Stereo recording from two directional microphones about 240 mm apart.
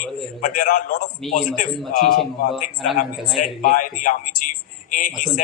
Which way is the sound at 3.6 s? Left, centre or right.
Left.